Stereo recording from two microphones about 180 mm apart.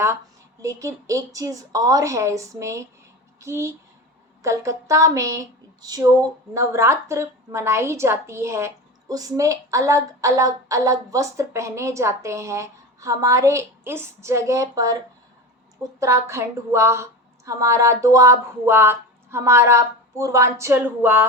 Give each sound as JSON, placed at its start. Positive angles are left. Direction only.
{"t": 0.6, "sound": "a woman's voice", "side_deg": -15}
{"t": 16.0, "sound": "a woman's voice", "side_deg": -15}